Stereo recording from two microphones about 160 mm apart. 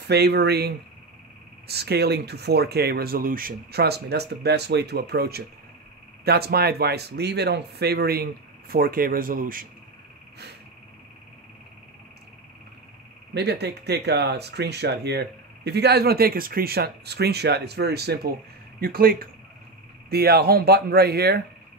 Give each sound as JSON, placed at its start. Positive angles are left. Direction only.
{"t": 0.0, "sound": "speech", "side_deg": -90}
{"t": 6.2, "sound": "speech", "side_deg": -80}
{"t": 13.3, "sound": "speech", "side_deg": -90}
{"t": 18.8, "sound": "speech", "side_deg": -70}
{"t": 20.1, "sound": "speech", "side_deg": -80}